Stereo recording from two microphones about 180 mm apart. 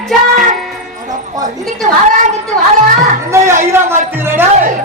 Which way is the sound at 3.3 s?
15° right (ahead or behind).